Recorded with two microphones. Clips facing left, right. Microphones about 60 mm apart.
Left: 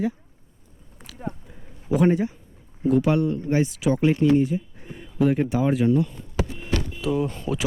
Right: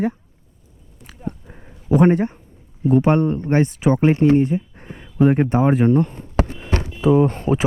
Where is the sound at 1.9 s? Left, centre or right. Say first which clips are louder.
Right 5 dB; right.